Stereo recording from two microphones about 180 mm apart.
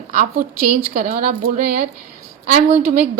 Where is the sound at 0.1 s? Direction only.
50° right (ahead or behind).